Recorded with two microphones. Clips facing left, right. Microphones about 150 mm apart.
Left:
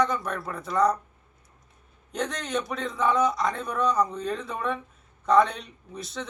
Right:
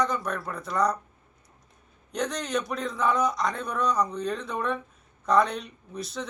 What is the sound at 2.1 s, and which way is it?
Speech, centre (ahead or behind).